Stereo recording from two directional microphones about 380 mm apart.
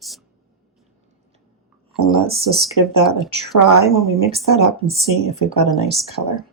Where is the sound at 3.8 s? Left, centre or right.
Centre.